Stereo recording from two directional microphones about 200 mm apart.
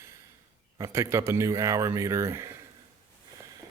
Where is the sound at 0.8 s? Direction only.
15° right (ahead or behind).